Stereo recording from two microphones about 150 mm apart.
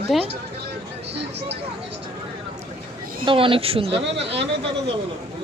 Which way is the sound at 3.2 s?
35° right (ahead or behind).